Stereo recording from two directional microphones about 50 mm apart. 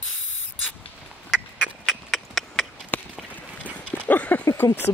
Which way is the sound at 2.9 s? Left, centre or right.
Left.